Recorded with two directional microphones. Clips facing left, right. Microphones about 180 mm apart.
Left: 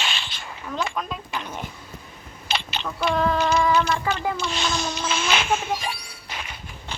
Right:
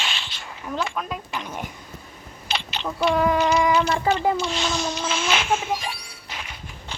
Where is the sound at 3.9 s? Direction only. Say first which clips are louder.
Right 4 dB; 30° right (ahead or behind).